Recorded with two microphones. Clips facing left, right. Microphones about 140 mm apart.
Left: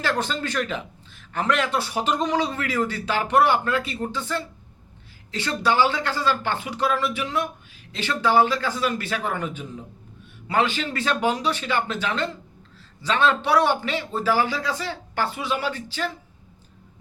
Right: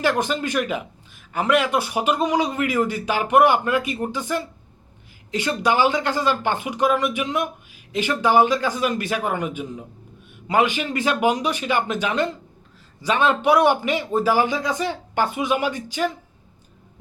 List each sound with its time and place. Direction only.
0.0 s a man's voice: 15° right (ahead or behind)